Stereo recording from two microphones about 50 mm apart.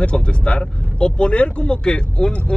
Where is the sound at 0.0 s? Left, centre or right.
Left.